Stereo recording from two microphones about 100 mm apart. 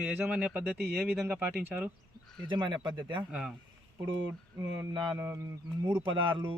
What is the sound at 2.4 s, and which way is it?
Speech, 50° right (ahead or behind).